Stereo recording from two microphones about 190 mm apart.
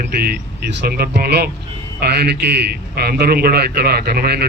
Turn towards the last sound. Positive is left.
turn(degrees=-55)  # may be behind; listen again after turning